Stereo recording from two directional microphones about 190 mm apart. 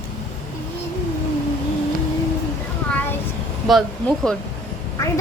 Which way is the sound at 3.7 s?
Centre (ahead or behind).